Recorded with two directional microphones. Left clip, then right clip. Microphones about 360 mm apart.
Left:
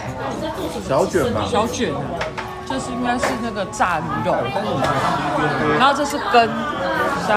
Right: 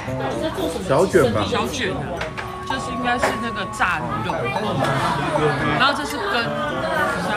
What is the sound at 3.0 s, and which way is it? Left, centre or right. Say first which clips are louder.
Speech: even; centre.